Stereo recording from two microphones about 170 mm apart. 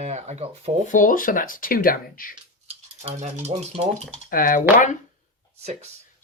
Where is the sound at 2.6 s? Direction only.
40° right (ahead or behind).